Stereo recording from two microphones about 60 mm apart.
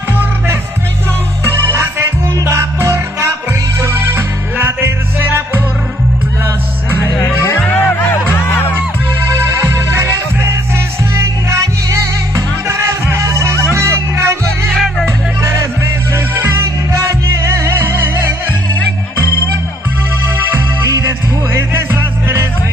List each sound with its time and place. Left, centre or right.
2.4 s music: right
3.8 s music: right
7.4 s music: left
12.6 s music: right
17.5 s music: right
21.9 s music: right